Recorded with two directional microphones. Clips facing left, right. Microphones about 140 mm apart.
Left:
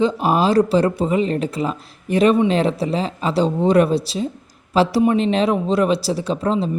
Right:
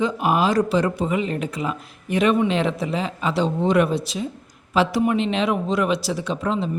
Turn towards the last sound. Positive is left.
turn(degrees=35)  # may be behind; listen again after turning